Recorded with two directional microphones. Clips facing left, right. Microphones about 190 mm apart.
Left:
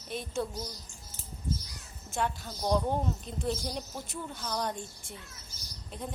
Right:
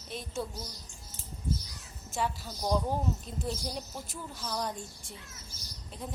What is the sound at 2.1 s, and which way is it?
Speech, centre (ahead or behind).